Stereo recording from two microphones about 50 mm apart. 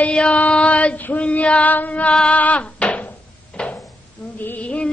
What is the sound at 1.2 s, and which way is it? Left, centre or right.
Female singing, left.